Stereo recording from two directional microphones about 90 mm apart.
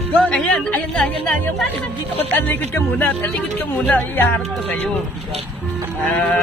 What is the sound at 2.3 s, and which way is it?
Speech, 25° left (ahead or behind).